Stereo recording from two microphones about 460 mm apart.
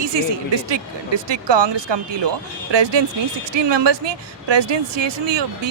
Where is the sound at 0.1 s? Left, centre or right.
Right.